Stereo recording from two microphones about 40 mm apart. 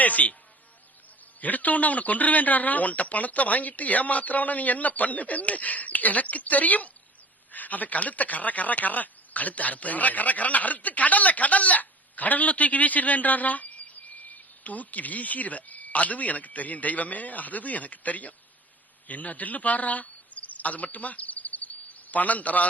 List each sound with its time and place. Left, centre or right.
0.0 s speech: left
1.4 s speech: left